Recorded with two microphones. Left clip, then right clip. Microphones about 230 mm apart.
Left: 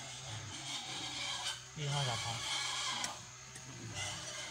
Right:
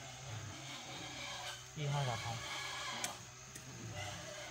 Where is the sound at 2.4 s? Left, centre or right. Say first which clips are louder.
Left 5 dB; left.